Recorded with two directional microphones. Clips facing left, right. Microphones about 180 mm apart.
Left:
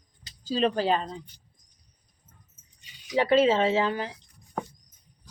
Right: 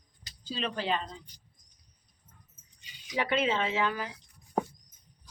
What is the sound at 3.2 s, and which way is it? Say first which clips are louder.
Speech: left 8 dB; 35° left (ahead or behind).